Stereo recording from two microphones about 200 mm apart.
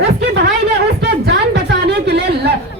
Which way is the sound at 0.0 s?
55° right (ahead or behind).